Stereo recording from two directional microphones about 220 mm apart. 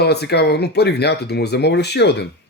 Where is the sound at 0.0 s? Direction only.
50° left (ahead or behind).